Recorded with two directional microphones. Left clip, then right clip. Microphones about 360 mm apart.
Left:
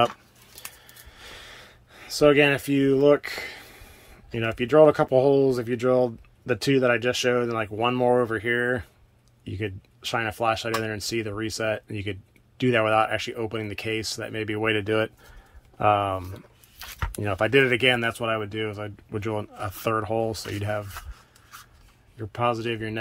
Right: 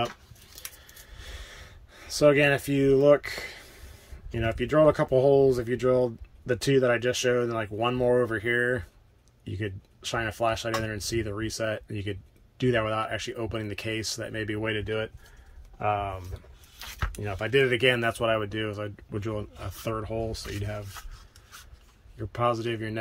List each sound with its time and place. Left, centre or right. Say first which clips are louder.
1.1 s a sound: left 3 dB; centre
4.3 s speech: left 4 dB; centre
22.3 s speech: left 2 dB; centre